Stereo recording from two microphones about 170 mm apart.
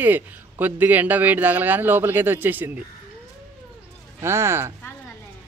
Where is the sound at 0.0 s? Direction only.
10° right (ahead or behind).